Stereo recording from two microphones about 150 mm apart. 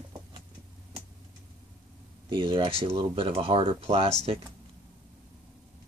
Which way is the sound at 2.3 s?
35° right (ahead or behind).